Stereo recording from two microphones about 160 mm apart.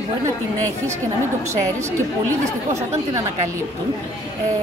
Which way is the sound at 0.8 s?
20° right (ahead or behind).